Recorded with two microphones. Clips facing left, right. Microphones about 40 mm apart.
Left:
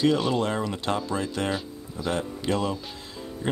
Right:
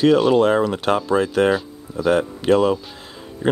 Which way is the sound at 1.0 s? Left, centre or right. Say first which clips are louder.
Right 11 dB; centre.